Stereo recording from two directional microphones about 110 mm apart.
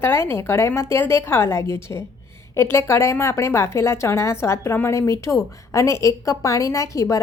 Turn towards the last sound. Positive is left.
turn(degrees=30)  # may be behind; listen again after turning